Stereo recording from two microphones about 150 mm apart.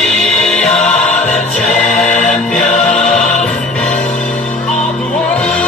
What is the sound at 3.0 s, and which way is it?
Music, 5° left (ahead or behind).